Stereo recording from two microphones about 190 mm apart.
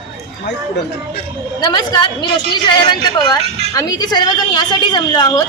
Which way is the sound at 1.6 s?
20° left (ahead or behind).